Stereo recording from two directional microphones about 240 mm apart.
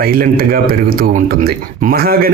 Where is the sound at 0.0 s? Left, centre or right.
Right.